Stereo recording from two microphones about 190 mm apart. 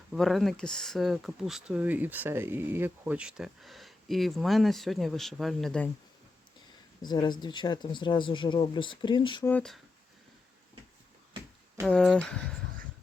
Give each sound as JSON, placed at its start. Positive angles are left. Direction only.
{"t": 0.1, "sound": "speech", "side_deg": 0}
{"t": 7.0, "sound": "speech", "side_deg": 20}
{"t": 9.5, "sound": "speech", "side_deg": 5}
{"t": 11.8, "sound": "speech", "side_deg": 5}